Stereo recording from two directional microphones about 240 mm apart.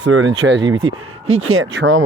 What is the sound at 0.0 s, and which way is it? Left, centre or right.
Speech, right.